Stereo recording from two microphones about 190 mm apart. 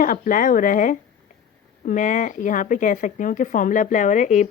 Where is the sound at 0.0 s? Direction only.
45° left (ahead or behind).